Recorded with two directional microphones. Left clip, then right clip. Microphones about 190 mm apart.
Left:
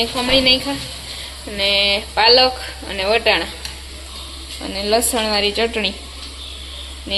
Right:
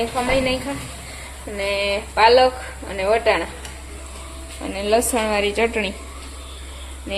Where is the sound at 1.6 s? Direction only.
5° left (ahead or behind).